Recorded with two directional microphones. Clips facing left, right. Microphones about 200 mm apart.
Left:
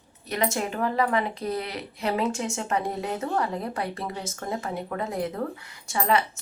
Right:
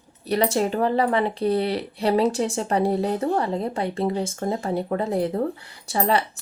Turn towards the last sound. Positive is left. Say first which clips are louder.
# right 2 dB
turn(degrees=-35)  # may be behind; listen again after turning